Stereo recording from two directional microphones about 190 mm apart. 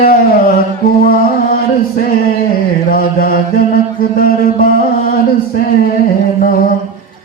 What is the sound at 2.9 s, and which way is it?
Speech, 50° left (ahead or behind).